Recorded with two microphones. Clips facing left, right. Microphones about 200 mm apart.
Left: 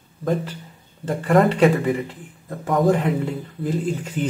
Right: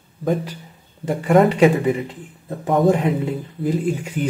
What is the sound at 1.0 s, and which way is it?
Speech, 15° right (ahead or behind).